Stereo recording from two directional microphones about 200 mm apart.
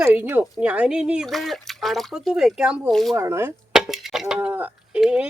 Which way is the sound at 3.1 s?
15° right (ahead or behind).